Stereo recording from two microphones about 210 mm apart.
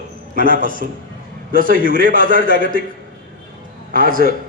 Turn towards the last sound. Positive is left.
turn(degrees=-40)  # may be behind; listen again after turning